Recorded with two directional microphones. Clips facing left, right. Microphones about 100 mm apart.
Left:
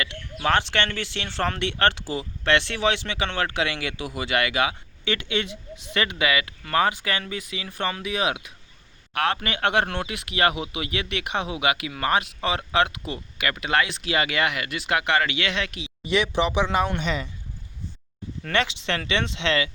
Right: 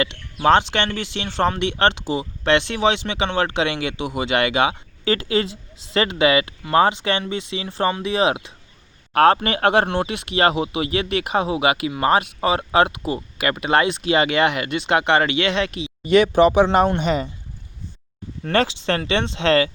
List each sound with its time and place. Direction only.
0.0 s speech: 25° right (ahead or behind)
16.0 s speech: 50° right (ahead or behind)
18.4 s speech: 35° right (ahead or behind)